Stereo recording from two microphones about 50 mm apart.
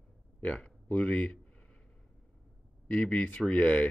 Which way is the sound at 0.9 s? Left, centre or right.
Left.